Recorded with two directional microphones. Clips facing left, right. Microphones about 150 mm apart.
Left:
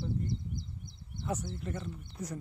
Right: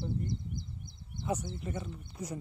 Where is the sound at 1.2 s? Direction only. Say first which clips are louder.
Right 2 dB; 20° right (ahead or behind).